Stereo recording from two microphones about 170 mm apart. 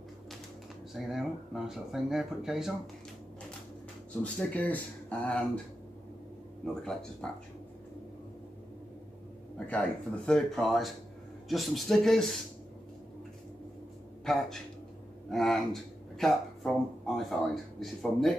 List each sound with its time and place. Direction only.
0.9 s speech: centre (ahead or behind)
4.2 s speech: 10° left (ahead or behind)
6.6 s speech: 5° left (ahead or behind)
9.7 s speech: 5° left (ahead or behind)
14.2 s speech: centre (ahead or behind)